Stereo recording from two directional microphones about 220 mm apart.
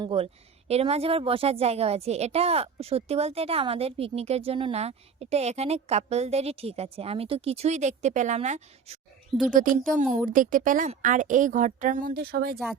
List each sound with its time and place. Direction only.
0.0 s a woman's voice: 25° right (ahead or behind); by 12.5 s 45° right (ahead or behind)